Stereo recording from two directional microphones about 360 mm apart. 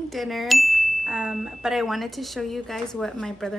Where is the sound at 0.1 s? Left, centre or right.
Centre.